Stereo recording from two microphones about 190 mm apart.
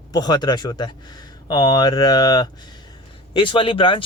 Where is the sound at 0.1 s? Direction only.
20° left (ahead or behind).